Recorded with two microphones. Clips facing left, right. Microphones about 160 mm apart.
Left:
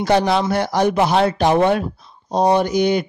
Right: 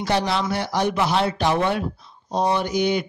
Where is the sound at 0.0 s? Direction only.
50° left (ahead or behind).